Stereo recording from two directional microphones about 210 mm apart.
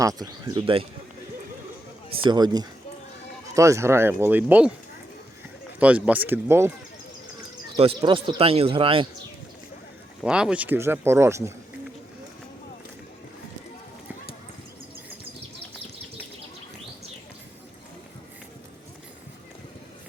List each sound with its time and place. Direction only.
0.0 s speech: 15° right (ahead or behind)
2.2 s speech: 20° right (ahead or behind)
5.8 s speech: 5° right (ahead or behind)
7.8 s speech: 25° right (ahead or behind)
10.2 s speech: 5° right (ahead or behind)